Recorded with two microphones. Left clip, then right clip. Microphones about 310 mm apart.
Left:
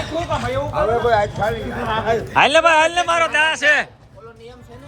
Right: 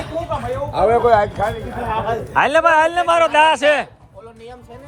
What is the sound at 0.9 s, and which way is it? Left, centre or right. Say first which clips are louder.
Speech: right 3 dB; right.